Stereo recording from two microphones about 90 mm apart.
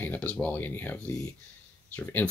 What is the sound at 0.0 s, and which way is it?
Speech, 15° left (ahead or behind).